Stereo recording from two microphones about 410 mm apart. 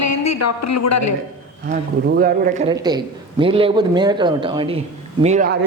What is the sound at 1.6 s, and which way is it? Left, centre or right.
A man's voice, right.